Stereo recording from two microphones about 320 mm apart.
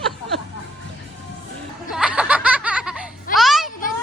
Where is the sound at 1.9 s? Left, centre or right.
Centre.